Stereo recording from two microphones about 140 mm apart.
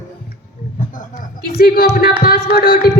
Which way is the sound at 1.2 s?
90° left.